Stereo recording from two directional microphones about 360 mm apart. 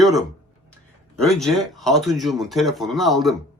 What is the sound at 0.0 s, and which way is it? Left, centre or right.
Speech, centre.